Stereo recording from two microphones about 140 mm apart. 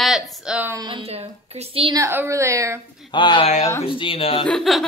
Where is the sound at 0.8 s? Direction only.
40° right (ahead or behind).